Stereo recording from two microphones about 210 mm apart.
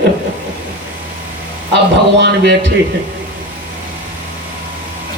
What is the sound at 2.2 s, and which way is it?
Speech, 55° right (ahead or behind).